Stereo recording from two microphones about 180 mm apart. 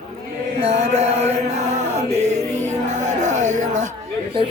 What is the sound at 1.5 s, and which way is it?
Chant, 40° right (ahead or behind).